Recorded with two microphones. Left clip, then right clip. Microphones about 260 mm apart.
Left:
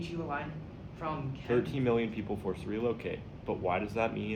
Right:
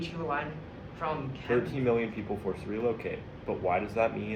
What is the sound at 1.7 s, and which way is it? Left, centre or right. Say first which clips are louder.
Speech: right 2 dB; centre.